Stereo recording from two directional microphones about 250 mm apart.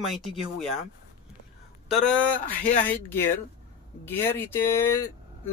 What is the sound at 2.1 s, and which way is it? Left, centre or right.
Speech, centre.